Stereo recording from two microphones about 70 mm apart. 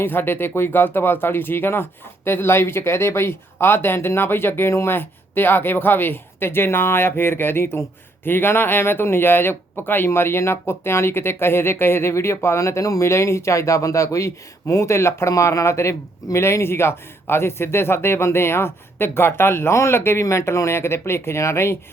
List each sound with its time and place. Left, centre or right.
0.0 s speech: left